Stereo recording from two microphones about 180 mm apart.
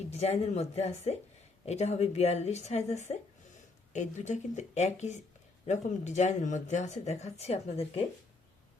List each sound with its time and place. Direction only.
0.1 s speech: 35° left (ahead or behind)